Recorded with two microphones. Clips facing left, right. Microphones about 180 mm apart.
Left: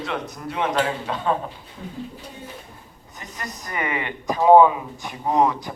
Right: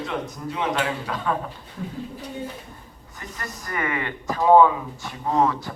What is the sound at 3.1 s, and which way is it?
Speech, 20° left (ahead or behind).